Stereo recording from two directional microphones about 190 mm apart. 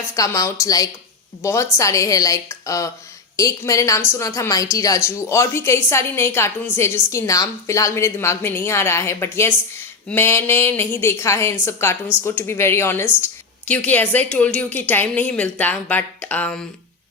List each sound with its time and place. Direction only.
0.2 s a woman's voice: 20° left (ahead or behind)